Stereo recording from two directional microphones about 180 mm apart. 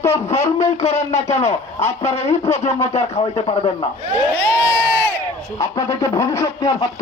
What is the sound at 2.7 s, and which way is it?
Speech, 15° left (ahead or behind).